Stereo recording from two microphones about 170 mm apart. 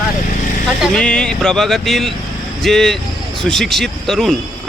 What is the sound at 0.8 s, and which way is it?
Speech, 5° left (ahead or behind).